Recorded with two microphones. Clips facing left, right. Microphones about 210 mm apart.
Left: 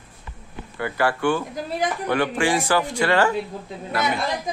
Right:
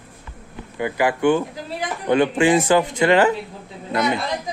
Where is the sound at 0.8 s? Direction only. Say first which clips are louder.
Right 3 dB; 15° right (ahead or behind).